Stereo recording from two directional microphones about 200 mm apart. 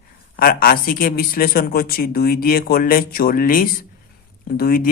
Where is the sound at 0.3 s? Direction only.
45° left (ahead or behind).